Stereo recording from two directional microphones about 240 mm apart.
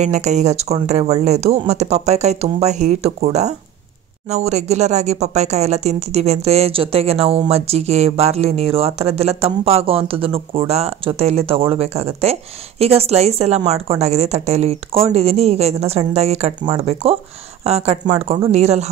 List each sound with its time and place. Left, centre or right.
0.0 s speech: right